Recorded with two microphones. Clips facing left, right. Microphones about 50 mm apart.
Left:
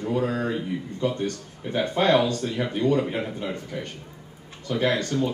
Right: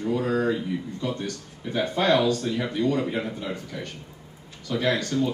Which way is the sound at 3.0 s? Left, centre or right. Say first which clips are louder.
Even; centre.